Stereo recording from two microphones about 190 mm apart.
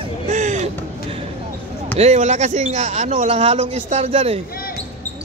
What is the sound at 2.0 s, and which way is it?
Speech, 35° right (ahead or behind).